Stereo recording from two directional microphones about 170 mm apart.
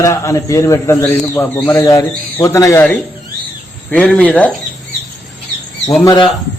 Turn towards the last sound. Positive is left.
turn(degrees=30)  # may be behind; listen again after turning